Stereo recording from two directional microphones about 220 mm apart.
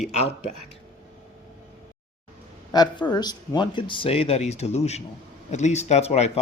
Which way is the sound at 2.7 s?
20° left (ahead or behind).